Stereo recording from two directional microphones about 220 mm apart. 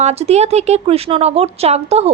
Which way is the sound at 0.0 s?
30° right (ahead or behind).